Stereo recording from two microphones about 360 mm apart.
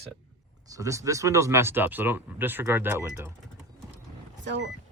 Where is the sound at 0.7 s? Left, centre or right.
Centre.